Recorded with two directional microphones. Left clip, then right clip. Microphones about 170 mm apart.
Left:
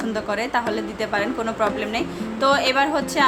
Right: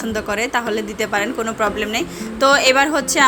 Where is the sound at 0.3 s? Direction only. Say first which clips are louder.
Right 3 dB; 15° right (ahead or behind).